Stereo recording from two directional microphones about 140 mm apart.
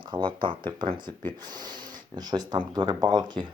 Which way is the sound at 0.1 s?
35° right (ahead or behind).